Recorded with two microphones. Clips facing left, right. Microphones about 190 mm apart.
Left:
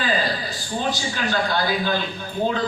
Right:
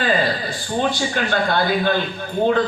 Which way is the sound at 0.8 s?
55° right (ahead or behind).